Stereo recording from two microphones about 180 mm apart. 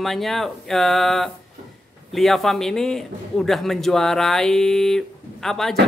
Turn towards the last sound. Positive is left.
turn(degrees=0)  # may be behind; listen again after turning